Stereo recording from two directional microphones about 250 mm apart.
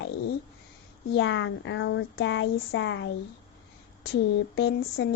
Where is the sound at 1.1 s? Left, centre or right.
Left.